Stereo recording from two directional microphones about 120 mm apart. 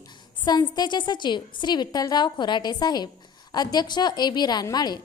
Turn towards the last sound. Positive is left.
turn(degrees=35)  # may be behind; listen again after turning